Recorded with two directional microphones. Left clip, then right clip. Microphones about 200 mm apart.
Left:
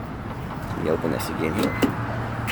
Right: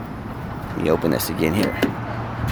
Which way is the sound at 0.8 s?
50° right (ahead or behind).